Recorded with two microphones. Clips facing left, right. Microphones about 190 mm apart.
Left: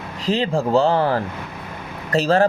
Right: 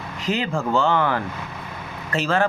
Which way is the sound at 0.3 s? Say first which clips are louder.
Left 4 dB; 30° left (ahead or behind).